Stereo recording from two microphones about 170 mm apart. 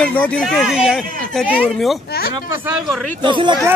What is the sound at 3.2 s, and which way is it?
Speech, 30° right (ahead or behind).